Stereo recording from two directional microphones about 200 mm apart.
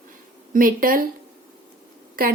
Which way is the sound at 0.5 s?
45° right (ahead or behind).